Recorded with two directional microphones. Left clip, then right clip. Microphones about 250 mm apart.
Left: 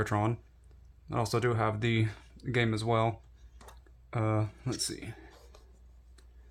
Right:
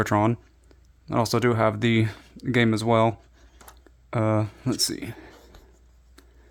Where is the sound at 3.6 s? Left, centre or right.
Right.